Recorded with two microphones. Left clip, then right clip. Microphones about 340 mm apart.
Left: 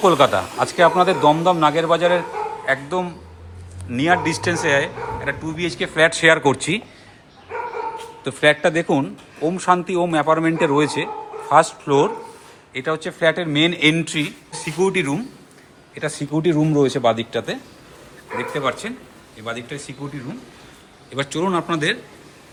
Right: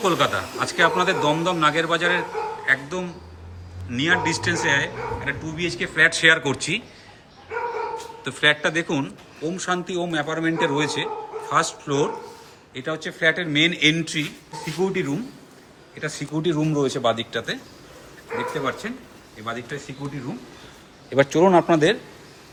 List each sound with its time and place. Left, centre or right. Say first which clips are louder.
0.0 s a man's voice: left 6 dB; centre
8.2 s a man's voice: left 4 dB; centre
18.6 s a man's voice: left 4 dB; centre
21.1 s a man's voice: right 6 dB; right